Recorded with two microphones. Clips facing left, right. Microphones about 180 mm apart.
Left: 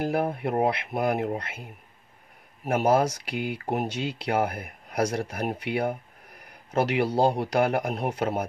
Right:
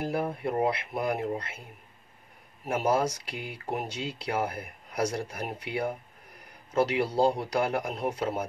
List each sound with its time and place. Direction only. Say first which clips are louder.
0.0 s speech: left 4 dB; 80° left
2.7 s speech: left 4 dB; 65° left (ahead or behind)